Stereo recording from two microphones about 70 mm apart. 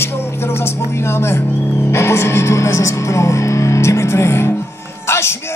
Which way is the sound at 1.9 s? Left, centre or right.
Left.